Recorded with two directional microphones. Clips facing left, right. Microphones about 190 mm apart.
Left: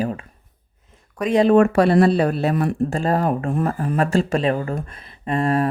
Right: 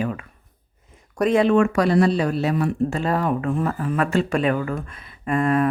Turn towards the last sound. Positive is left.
turn(degrees=35)  # may be behind; listen again after turning